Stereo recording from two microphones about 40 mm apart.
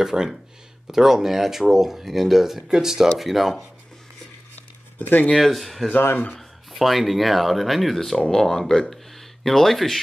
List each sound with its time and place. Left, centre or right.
0.0 s speech: centre
4.9 s speech: left
5.3 s speech: centre
8.9 s a sound: centre